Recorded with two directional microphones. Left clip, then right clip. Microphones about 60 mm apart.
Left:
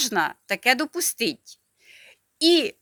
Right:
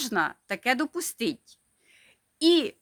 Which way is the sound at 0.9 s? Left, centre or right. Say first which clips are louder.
Left 5 dB; left.